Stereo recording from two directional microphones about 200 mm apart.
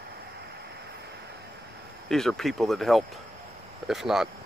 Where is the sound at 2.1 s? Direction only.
Centre (ahead or behind).